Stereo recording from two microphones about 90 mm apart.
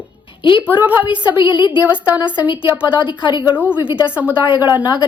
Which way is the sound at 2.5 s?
60° left (ahead or behind).